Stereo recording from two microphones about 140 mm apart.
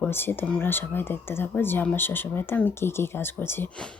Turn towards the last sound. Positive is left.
turn(degrees=15)  # may be behind; listen again after turning